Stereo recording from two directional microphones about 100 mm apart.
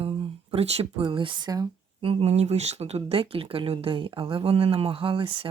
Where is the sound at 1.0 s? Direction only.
55° right (ahead or behind).